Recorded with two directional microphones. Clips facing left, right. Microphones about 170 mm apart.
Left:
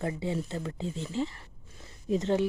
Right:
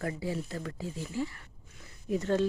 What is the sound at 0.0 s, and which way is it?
Speech, 25° left (ahead or behind).